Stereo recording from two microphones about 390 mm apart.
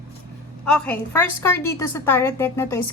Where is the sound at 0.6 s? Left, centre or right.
Centre.